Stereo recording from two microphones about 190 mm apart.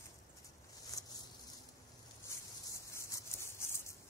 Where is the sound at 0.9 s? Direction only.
20° left (ahead or behind).